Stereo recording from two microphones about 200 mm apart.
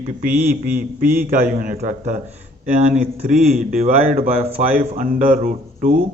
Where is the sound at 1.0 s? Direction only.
10° right (ahead or behind).